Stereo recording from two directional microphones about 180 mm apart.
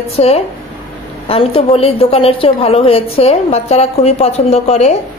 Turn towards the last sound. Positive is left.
turn(degrees=35)  # may be behind; listen again after turning